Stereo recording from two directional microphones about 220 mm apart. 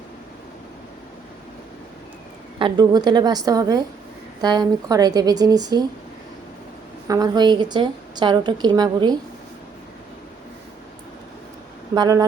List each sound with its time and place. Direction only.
2.6 s a woman's voice: 20° right (ahead or behind)
7.1 s a woman's voice: 20° right (ahead or behind)
11.9 s a woman's voice: 15° right (ahead or behind)